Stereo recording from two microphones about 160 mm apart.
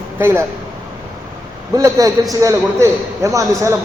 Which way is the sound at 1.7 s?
20° right (ahead or behind).